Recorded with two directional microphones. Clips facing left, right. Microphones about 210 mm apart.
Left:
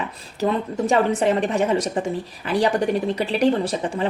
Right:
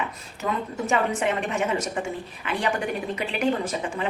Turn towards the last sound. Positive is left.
turn(degrees=35)  # may be behind; listen again after turning